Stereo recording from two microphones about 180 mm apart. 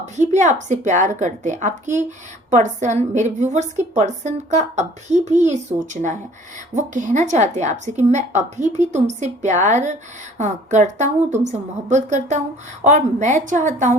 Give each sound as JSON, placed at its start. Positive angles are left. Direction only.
{"t": 0.0, "sound": "a woman's voice", "side_deg": -40}